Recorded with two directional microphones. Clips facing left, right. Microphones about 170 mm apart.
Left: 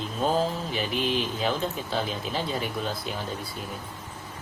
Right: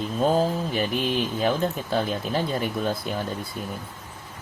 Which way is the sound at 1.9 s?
50° right (ahead or behind).